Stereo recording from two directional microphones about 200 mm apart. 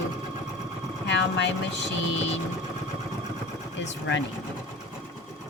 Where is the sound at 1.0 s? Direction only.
65° left (ahead or behind).